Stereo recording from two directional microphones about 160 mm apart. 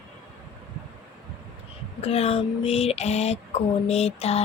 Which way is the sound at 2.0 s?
40° left (ahead or behind).